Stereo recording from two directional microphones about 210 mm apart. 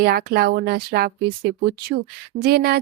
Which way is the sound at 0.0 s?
45° right (ahead or behind).